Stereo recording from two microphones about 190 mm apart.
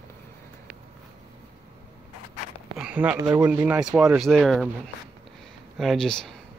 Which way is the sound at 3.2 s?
20° right (ahead or behind).